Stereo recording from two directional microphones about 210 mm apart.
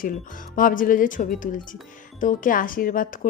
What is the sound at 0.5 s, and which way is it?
A woman's voice, 40° left (ahead or behind).